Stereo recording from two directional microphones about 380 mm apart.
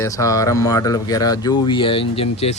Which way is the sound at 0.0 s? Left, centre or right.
Centre.